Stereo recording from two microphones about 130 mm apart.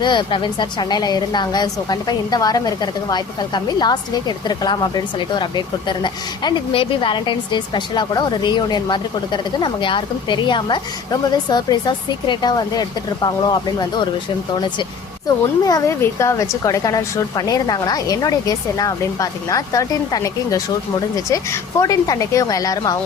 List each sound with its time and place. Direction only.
0.0 s a woman's voice: 35° left (ahead or behind)
15.6 s a woman's voice: 25° left (ahead or behind)